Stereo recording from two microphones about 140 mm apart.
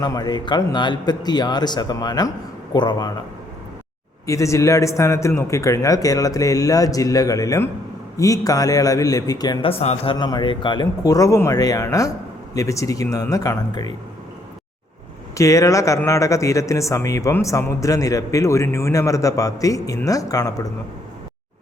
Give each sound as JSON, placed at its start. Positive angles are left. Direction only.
{"t": 0.0, "sound": "speech", "side_deg": 30}
{"t": 4.3, "sound": "speech", "side_deg": 20}
{"t": 9.6, "sound": "a man's voice", "side_deg": 50}
{"t": 10.2, "sound": "speech", "side_deg": 30}
{"t": 15.4, "sound": "speech", "side_deg": 25}